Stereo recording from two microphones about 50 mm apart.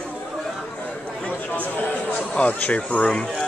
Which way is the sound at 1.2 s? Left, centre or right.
Left.